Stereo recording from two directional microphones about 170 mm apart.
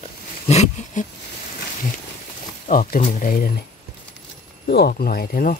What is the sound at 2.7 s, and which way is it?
Speech, 55° left (ahead or behind).